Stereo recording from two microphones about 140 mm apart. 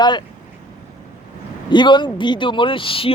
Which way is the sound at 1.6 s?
35° left (ahead or behind).